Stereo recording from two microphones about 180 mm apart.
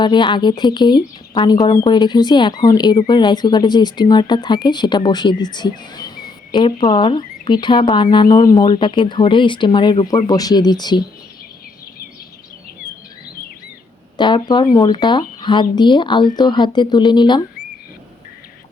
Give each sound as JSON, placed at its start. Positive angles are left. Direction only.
{"t": 0.0, "sound": "speech", "side_deg": 25}
{"t": 14.2, "sound": "speech", "side_deg": 25}